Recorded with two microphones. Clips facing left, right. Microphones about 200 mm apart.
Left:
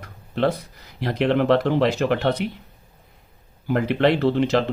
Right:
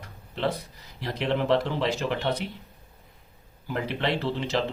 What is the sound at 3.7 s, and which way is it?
Speech, 60° left (ahead or behind).